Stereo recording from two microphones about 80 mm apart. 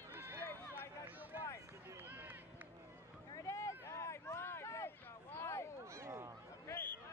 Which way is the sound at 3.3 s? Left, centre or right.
Left.